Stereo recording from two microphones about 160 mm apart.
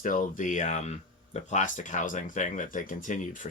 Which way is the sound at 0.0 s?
55° left (ahead or behind).